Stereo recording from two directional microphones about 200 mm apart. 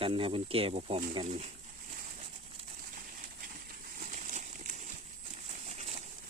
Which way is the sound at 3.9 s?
40° right (ahead or behind).